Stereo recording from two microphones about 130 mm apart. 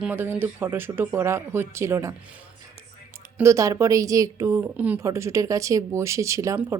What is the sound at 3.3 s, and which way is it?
Speech, 25° right (ahead or behind).